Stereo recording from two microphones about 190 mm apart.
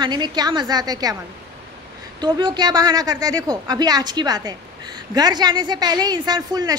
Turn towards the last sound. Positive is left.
turn(degrees=-20)  # may be behind; listen again after turning